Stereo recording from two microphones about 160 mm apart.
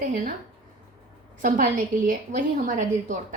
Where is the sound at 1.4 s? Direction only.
55° right (ahead or behind).